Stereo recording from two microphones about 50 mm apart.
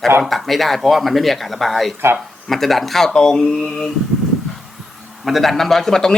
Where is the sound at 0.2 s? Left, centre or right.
Centre.